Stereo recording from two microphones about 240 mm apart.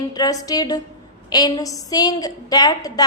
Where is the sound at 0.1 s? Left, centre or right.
Centre.